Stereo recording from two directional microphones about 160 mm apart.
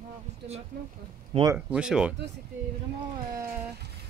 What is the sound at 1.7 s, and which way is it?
Speech, 5° right (ahead or behind).